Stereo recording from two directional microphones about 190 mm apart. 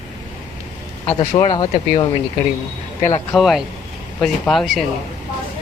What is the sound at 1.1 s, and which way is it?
Speech, 30° left (ahead or behind).